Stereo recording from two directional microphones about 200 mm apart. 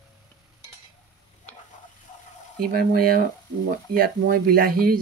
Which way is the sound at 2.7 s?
50° right (ahead or behind).